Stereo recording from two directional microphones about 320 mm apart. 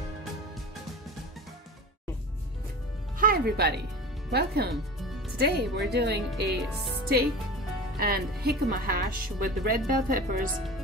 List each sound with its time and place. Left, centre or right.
3.2 s speech: right
8.0 s speech: right